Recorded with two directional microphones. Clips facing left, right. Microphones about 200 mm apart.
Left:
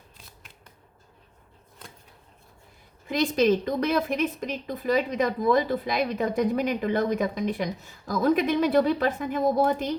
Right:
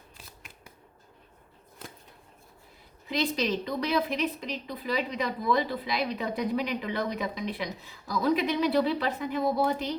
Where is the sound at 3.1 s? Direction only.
50° left (ahead or behind).